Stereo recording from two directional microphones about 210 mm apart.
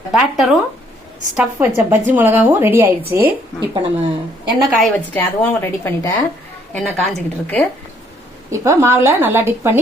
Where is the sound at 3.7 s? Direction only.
25° right (ahead or behind).